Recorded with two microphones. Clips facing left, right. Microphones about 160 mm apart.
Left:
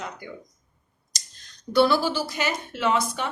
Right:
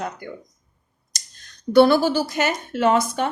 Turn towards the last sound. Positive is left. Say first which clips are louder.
# right 5 dB
turn(degrees=-45)  # may be behind; listen again after turning